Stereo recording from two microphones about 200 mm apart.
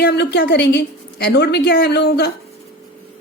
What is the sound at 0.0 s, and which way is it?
A woman's voice, 55° left (ahead or behind).